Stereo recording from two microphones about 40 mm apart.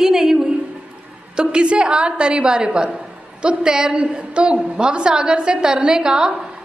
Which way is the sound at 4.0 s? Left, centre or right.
Right.